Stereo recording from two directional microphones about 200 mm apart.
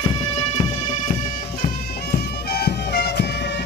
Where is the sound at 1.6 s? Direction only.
50° left (ahead or behind).